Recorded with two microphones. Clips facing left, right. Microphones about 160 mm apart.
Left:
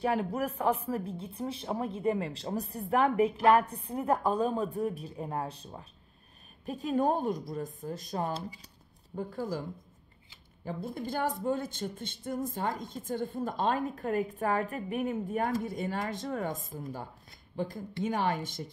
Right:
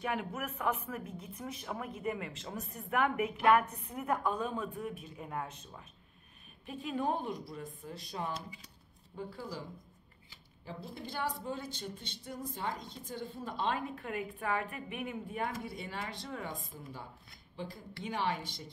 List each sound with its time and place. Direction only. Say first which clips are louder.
0.0 s speech: left 7 dB; 35° left (ahead or behind)
8.3 s speech: left 5 dB; 30° left (ahead or behind)
9.1 s speech: left 8 dB; 45° left (ahead or behind)
10.6 s speech: left 8 dB; 50° left (ahead or behind)